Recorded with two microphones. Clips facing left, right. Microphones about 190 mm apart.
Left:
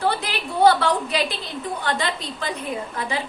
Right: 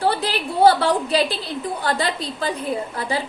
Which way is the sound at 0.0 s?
35° right (ahead or behind).